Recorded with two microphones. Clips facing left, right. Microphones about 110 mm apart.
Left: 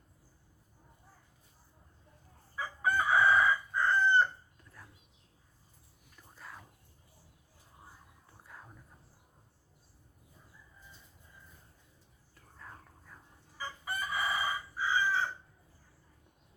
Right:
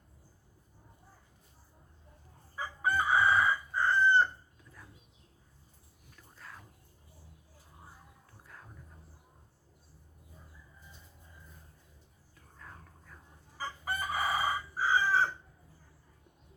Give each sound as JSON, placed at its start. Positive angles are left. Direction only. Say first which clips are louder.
{"t": 2.6, "sound": "chicken", "louder": "even", "side_deg": -5}
{"t": 6.1, "sound": "whispering", "louder": "left 1 dB", "side_deg": 5}
{"t": 8.4, "sound": "a sound", "louder": "left 1 dB", "side_deg": 5}
{"t": 12.5, "sound": "whispering", "louder": "left 1 dB", "side_deg": 5}
{"t": 13.6, "sound": "chicken", "louder": "right 2 dB", "side_deg": -40}